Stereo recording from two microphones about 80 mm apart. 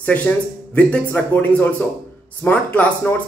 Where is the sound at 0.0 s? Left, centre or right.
Centre.